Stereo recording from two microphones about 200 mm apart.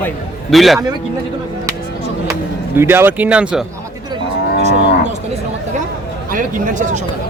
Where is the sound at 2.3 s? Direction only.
10° right (ahead or behind).